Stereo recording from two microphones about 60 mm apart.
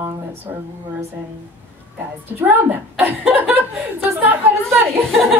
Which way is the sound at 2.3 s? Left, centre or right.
Right.